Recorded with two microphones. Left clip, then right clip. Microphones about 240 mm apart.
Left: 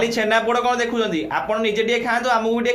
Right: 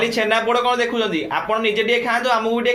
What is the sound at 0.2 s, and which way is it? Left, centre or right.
Speech, centre.